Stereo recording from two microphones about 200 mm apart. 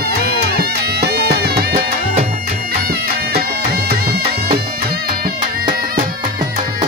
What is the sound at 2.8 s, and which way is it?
Music, 50° right (ahead or behind).